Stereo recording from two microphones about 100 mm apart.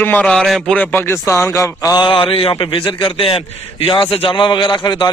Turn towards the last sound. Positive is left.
turn(degrees=45)  # may be behind; listen again after turning